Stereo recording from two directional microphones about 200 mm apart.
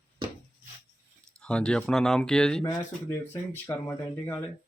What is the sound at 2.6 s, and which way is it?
Speech, 15° left (ahead or behind).